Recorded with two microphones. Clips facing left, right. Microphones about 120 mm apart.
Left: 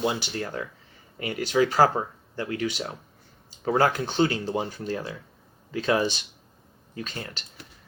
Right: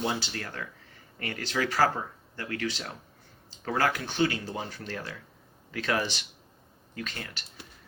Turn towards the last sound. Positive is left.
turn(degrees=25)  # may be behind; listen again after turning